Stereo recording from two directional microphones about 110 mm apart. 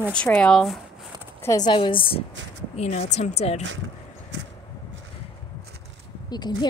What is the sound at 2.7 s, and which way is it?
Speech, 90° left.